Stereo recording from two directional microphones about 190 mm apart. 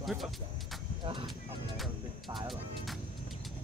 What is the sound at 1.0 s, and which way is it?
Speech, 25° right (ahead or behind).